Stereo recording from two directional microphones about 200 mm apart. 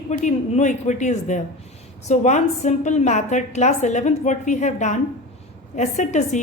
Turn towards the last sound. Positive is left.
turn(degrees=35)  # may be behind; listen again after turning